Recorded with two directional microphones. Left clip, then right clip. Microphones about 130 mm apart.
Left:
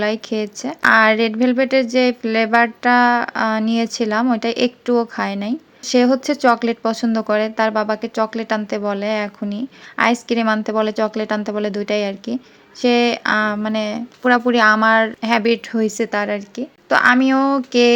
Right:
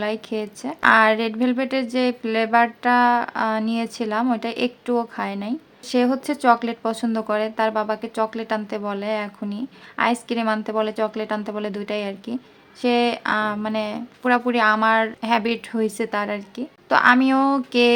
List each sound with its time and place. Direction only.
0.6 s speech: 30° left (ahead or behind)